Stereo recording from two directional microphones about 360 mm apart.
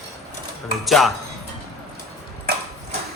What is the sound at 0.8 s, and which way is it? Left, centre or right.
Speech, centre.